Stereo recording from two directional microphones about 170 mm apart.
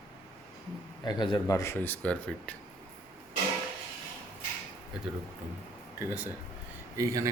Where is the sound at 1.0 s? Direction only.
25° left (ahead or behind); by 2.5 s 5° left (ahead or behind).